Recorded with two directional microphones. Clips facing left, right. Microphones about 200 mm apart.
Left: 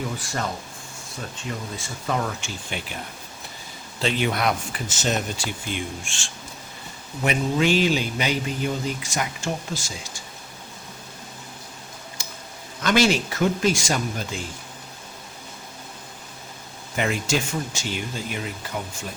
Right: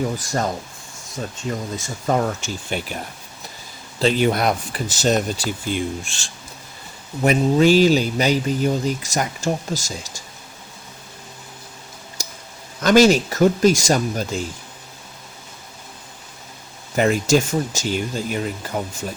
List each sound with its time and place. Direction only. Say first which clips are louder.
0.2 s a man's voice: right 6 dB; 40° right (ahead or behind)
1.7 s speech: right 6 dB; 40° right (ahead or behind)
4.0 s a man's voice: right 5 dB; 40° right (ahead or behind)
12.2 s a sound: right 8 dB; 40° right (ahead or behind)
12.8 s a man's voice: right 7 dB; 40° right (ahead or behind)
17.0 s a man's voice: right 7 dB; 40° right (ahead or behind)